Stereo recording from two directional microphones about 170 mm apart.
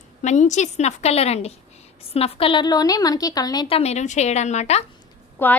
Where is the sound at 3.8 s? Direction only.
40° left (ahead or behind).